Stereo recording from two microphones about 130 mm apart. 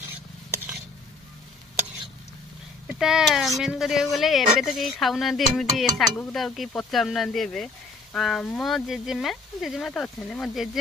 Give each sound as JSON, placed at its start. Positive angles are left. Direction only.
{"t": 0.5, "sound": "stir", "side_deg": -15}
{"t": 3.0, "sound": "speech", "side_deg": -5}